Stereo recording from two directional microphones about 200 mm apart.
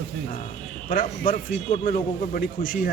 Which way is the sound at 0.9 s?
45° left (ahead or behind).